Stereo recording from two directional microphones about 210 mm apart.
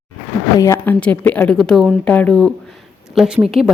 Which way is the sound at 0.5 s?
15° left (ahead or behind).